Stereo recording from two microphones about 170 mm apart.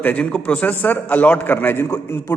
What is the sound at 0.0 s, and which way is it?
A man's voice, 10° left (ahead or behind).